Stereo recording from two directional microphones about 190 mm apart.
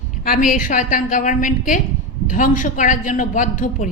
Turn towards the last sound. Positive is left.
turn(degrees=40)  # may be behind; listen again after turning